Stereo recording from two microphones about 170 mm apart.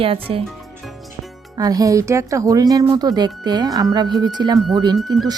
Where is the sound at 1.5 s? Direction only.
20° right (ahead or behind).